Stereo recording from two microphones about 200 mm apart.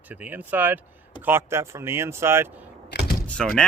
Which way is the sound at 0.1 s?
10° right (ahead or behind).